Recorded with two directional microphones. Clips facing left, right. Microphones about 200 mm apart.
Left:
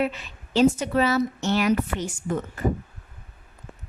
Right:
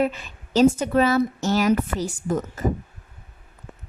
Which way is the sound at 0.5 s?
45° right (ahead or behind).